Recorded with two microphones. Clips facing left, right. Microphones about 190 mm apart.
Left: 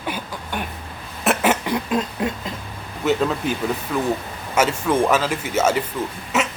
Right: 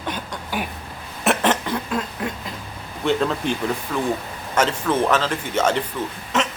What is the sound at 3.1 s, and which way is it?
Speech, 5° left (ahead or behind).